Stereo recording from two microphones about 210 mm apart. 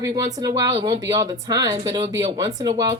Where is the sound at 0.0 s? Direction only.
20° right (ahead or behind).